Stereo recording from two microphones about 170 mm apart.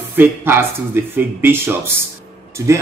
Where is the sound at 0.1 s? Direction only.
10° right (ahead or behind).